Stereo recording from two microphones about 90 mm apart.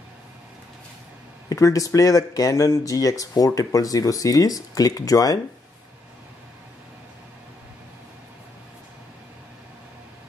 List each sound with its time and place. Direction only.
1.5 s speech: 40° left (ahead or behind)